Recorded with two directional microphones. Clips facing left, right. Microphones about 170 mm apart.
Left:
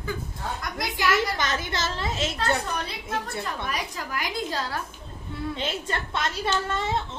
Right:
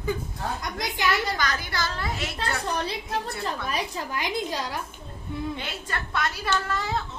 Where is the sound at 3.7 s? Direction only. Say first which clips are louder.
Right 2 dB; 25° right (ahead or behind).